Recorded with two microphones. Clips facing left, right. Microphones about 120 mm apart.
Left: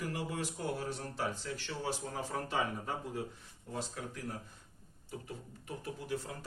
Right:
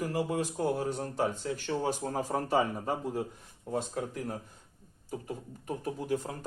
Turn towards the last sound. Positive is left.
turn(degrees=-45)  # may be behind; listen again after turning